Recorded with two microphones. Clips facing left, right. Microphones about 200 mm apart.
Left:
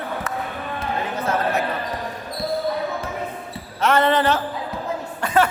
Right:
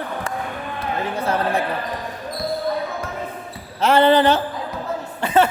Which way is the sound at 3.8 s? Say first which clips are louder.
Right 4 dB; 30° right (ahead or behind).